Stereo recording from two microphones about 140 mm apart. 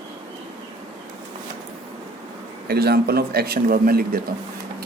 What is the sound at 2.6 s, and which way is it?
Speech, 90° right.